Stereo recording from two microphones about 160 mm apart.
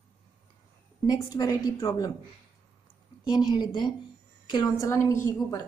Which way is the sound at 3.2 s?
25° left (ahead or behind).